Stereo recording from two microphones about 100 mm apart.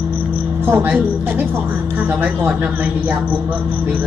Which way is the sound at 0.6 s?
20° right (ahead or behind).